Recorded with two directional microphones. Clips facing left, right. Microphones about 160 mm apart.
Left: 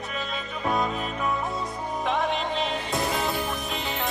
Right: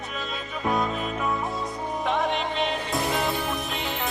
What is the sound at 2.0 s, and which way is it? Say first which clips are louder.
Music: even; centre (ahead or behind).